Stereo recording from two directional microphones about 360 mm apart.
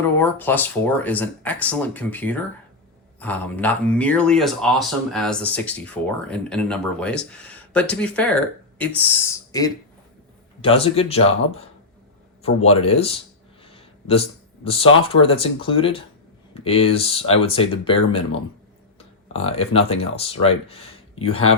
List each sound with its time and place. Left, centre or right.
0.2 s speech: centre